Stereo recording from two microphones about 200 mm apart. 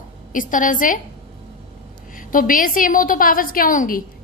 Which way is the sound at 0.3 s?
40° left (ahead or behind).